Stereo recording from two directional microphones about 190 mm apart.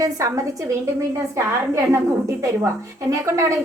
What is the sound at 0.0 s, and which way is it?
A woman's voice, 15° right (ahead or behind).